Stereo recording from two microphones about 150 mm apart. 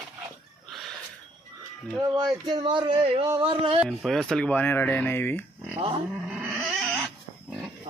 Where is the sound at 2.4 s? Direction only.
30° right (ahead or behind).